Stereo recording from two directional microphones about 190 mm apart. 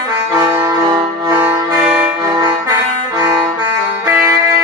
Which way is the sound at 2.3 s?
20° right (ahead or behind).